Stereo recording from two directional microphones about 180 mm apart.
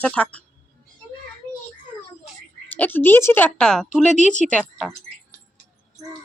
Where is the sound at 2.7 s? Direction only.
10° left (ahead or behind).